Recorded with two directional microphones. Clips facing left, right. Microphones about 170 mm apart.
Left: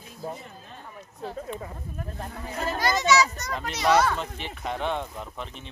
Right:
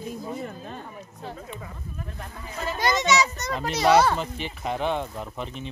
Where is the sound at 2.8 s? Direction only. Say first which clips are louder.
Even; 20° right (ahead or behind).